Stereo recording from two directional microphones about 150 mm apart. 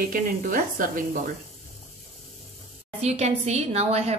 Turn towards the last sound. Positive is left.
turn(degrees=-45)  # may be behind; listen again after turning